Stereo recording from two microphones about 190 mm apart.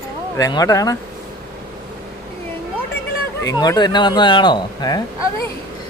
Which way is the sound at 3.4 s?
20° left (ahead or behind).